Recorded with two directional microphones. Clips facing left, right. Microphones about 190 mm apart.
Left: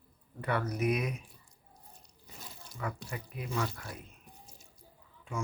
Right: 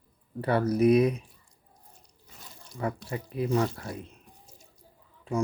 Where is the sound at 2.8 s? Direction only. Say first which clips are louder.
Right 7 dB; 30° right (ahead or behind).